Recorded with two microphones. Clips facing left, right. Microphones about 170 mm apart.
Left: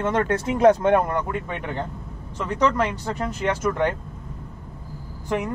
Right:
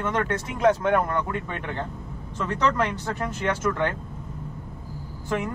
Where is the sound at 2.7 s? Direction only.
15° left (ahead or behind).